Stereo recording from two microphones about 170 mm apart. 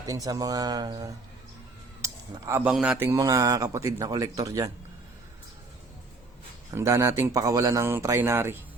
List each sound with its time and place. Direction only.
0.1 s speech: 20° right (ahead or behind)
2.0 s a sound: 15° right (ahead or behind)
2.6 s a man's voice: 5° right (ahead or behind)
3.1 s speech: 20° right (ahead or behind)
6.7 s speech: 15° right (ahead or behind)